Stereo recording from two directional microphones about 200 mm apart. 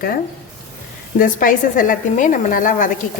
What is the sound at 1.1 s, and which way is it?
A woman's voice, 45° left (ahead or behind).